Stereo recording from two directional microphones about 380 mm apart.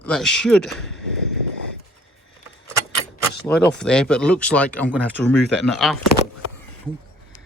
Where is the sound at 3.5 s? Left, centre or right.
Centre.